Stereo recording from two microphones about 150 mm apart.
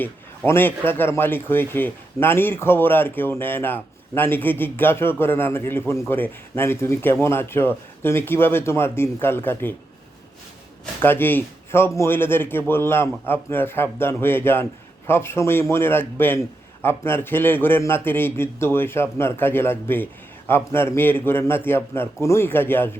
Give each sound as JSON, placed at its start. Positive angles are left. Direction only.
{"t": 0.0, "sound": "a man's voice", "side_deg": 15}
{"t": 11.0, "sound": "a man's voice", "side_deg": 15}